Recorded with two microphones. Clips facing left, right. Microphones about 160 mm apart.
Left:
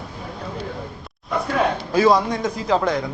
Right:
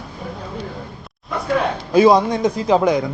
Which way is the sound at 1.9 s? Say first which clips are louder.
Right 5 dB; 20° right (ahead or behind).